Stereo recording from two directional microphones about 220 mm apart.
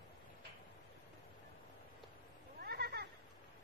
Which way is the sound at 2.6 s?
45° right (ahead or behind).